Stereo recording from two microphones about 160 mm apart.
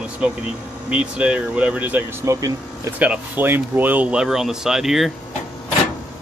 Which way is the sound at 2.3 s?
20° right (ahead or behind).